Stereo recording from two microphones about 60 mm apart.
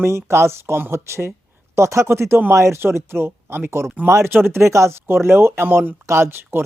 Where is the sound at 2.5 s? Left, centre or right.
Right.